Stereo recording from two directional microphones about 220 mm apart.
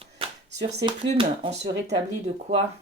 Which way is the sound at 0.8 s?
25° right (ahead or behind).